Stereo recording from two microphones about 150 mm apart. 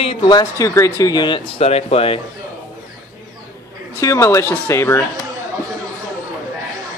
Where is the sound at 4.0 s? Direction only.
20° left (ahead or behind).